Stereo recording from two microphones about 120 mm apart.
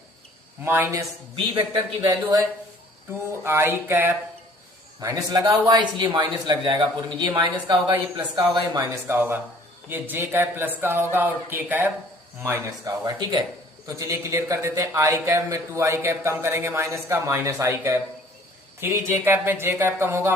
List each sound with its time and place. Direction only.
0.6 s a man's voice: 20° right (ahead or behind)
2.0 s a man's voice: 30° right (ahead or behind)
9.0 s a man's voice: 15° right (ahead or behind)